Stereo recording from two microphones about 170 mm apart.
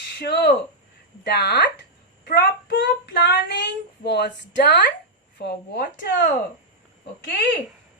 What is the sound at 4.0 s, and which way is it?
A man's voice, 75° left (ahead or behind).